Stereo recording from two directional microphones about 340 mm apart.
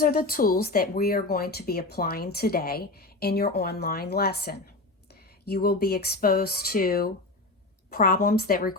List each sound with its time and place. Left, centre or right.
0.0 s speech: left